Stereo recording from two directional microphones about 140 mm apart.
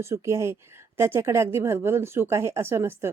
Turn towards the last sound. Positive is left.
turn(degrees=-20)  # may be behind; listen again after turning